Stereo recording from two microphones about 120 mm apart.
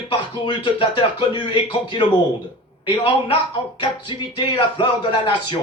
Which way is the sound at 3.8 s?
40° left (ahead or behind).